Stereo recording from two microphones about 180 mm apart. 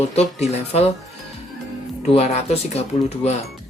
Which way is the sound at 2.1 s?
35° left (ahead or behind).